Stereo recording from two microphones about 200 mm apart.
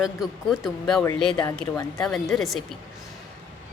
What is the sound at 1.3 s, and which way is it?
Speech, 20° left (ahead or behind).